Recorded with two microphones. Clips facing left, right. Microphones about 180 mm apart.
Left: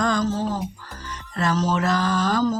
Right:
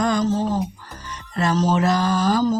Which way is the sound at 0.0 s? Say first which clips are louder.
Right 2 dB; 15° right (ahead or behind).